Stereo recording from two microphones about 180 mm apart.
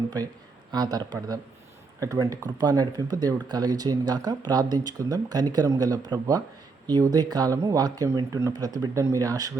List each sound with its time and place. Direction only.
0.7 s speech: 20° right (ahead or behind)